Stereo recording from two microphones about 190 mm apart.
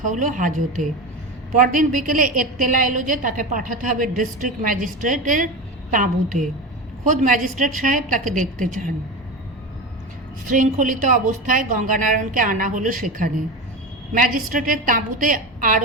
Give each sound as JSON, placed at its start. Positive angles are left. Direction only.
{"t": 0.0, "sound": "a woman's voice", "side_deg": -45}
{"t": 10.4, "sound": "a woman's voice", "side_deg": -45}